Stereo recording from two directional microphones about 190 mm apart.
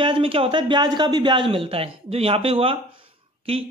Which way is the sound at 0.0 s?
30° right (ahead or behind).